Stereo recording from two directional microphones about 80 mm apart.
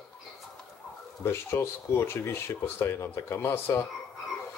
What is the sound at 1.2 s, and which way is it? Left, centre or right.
Speech, left.